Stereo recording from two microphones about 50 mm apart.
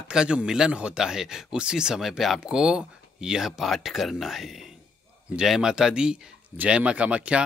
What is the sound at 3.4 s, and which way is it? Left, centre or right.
Speech, centre.